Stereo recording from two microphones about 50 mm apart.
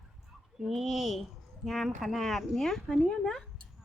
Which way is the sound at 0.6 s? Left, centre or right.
Centre.